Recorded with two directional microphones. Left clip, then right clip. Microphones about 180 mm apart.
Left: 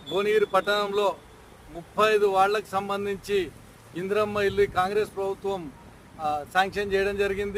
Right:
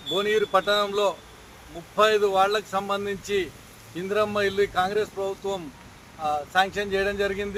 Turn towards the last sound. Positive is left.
turn(degrees=25)  # may be behind; listen again after turning